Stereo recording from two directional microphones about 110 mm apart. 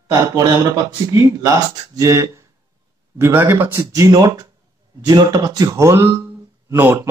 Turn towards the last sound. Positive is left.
turn(degrees=-25)  # may be behind; listen again after turning